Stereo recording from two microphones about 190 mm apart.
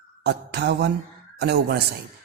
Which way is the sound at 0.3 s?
60° right (ahead or behind).